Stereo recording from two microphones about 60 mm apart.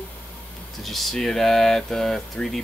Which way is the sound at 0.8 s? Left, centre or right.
Centre.